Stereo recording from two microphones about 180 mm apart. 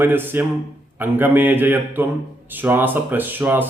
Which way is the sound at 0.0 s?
10° right (ahead or behind).